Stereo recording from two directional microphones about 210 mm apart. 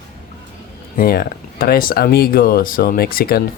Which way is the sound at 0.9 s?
45° left (ahead or behind).